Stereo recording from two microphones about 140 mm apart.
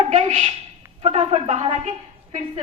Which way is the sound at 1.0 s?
45° right (ahead or behind).